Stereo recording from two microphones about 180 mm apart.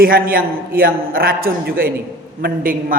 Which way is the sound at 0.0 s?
55° right (ahead or behind).